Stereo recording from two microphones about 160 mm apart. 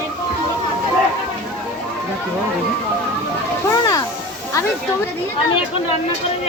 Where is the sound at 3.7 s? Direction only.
20° left (ahead or behind).